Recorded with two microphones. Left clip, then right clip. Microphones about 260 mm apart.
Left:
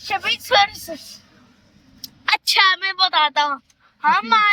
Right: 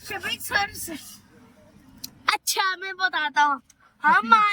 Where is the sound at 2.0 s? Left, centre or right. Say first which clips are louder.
Left 4 dB; centre.